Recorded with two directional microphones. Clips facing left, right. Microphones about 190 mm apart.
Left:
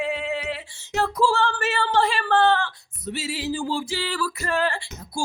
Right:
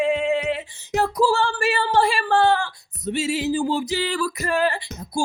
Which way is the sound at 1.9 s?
10° right (ahead or behind).